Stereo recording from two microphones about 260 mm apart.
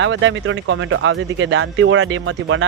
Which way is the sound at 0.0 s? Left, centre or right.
Right.